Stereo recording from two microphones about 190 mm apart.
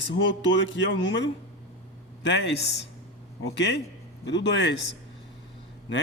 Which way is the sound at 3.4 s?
65° left (ahead or behind).